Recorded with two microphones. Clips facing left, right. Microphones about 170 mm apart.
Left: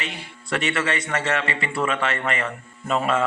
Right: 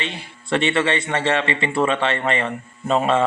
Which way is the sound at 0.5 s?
25° right (ahead or behind).